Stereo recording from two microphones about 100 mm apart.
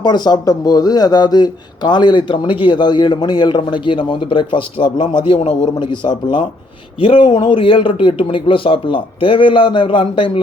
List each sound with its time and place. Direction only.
0.0 s a man's voice: 45° left (ahead or behind); by 10.4 s 60° left (ahead or behind)